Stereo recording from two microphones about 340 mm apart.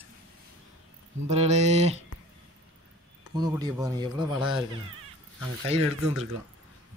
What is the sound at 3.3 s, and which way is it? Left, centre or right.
Speech, centre.